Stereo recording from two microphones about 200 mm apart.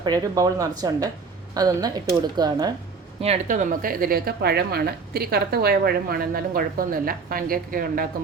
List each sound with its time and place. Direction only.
0.0 s speech: 20° right (ahead or behind)
3.2 s a woman's voice: 35° right (ahead or behind)